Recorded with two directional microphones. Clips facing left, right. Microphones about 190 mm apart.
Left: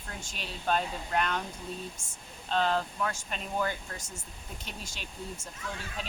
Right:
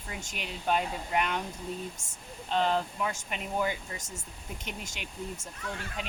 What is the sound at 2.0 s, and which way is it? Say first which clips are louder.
Speech: even; 40° right (ahead or behind).